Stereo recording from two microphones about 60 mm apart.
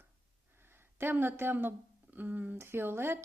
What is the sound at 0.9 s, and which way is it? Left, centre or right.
A woman's voice, right.